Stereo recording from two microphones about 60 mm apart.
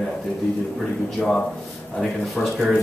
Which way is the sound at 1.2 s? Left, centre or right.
Centre.